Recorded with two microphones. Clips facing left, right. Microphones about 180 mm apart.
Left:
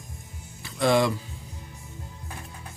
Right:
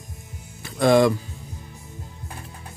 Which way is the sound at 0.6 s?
50° right (ahead or behind).